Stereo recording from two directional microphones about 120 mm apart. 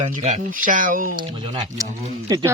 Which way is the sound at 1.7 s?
30° right (ahead or behind).